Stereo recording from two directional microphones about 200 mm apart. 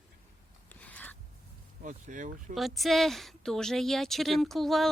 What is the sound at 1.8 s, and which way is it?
Speech, 40° right (ahead or behind).